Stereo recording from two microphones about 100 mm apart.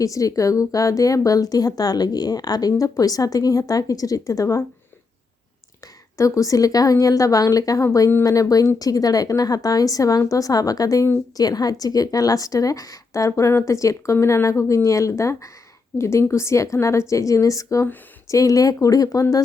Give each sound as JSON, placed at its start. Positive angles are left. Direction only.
{"t": 0.0, "sound": "a woman's voice", "side_deg": 35}
{"t": 5.8, "sound": "a woman's voice", "side_deg": 35}